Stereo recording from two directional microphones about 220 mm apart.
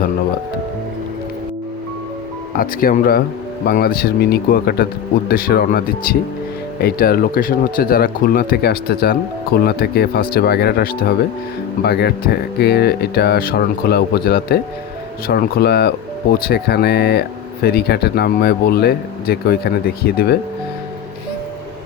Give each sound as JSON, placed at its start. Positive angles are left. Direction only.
{"t": 2.6, "sound": "speech", "side_deg": 40}